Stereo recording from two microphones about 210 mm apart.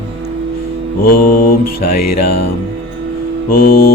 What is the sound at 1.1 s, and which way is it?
Music, 45° left (ahead or behind).